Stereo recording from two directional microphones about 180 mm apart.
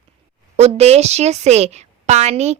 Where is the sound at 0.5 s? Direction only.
35° right (ahead or behind).